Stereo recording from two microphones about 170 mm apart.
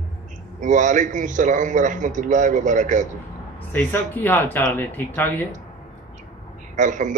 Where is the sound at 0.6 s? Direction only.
45° right (ahead or behind).